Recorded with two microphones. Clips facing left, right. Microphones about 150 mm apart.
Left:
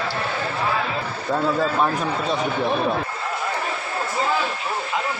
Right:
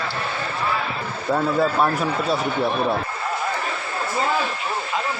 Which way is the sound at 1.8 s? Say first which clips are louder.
Right 1 dB; 5° right (ahead or behind).